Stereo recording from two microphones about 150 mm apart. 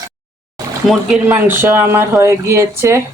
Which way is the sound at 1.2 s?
15° right (ahead or behind).